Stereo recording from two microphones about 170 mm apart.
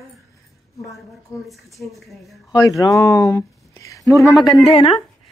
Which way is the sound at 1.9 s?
Centre (ahead or behind).